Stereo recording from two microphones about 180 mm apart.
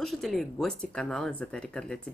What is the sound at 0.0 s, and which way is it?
Speech, centre (ahead or behind).